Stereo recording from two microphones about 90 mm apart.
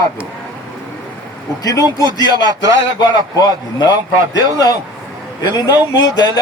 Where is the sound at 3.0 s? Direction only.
50° left (ahead or behind).